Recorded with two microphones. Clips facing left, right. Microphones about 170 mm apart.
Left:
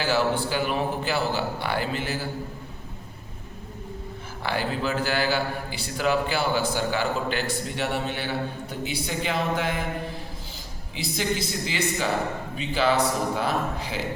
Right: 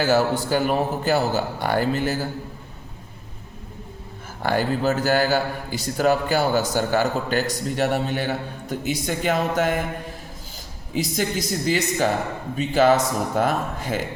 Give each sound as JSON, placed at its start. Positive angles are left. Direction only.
{"t": 0.0, "sound": "a man's voice", "side_deg": -45}
{"t": 4.4, "sound": "a man's voice", "side_deg": -45}
{"t": 10.9, "sound": "a man's voice", "side_deg": -45}